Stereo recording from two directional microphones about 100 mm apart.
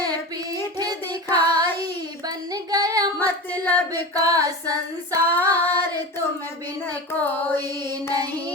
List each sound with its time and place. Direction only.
0.8 s child singing: 40° right (ahead or behind)
3.5 s female singing: 20° left (ahead or behind)
3.9 s female singing: 40° right (ahead or behind)
5.3 s female singing: 20° left (ahead or behind)
6.8 s carnatic music: 20° left (ahead or behind)